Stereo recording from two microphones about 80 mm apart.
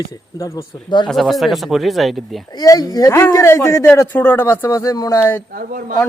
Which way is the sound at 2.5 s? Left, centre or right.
Left.